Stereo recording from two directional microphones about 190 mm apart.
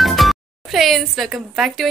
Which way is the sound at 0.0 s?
Centre (ahead or behind).